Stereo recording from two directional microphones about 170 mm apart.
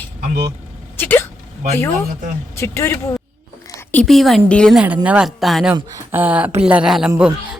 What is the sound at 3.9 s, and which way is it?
Speech, centre (ahead or behind).